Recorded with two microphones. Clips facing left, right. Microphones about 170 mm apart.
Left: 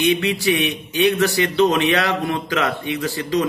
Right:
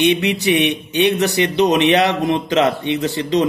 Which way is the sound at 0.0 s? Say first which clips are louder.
Right 2 dB; 20° right (ahead or behind).